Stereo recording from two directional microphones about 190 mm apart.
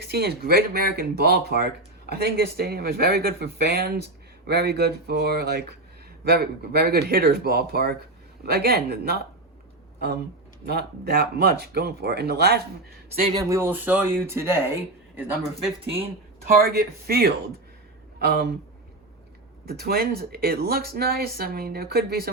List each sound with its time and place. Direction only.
0.0 s speech: 55° right (ahead or behind)
10.7 s speech: 55° right (ahead or behind)
13.2 s speech: 20° right (ahead or behind)
16.6 s speech: 55° right (ahead or behind)
19.6 s speech: 55° right (ahead or behind)